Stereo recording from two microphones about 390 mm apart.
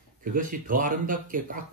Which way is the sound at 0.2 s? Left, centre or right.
Right.